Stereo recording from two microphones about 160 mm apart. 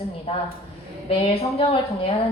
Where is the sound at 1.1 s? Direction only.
40° left (ahead or behind).